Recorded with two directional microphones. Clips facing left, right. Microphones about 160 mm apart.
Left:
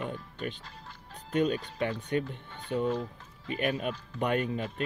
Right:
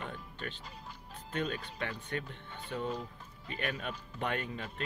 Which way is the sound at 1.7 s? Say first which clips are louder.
Left 8 dB; 20° left (ahead or behind).